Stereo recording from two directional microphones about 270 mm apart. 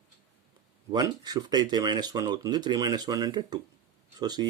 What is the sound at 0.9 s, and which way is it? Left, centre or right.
Speech, centre.